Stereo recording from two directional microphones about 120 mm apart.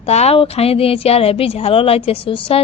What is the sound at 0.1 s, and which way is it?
Speech, 60° left (ahead or behind).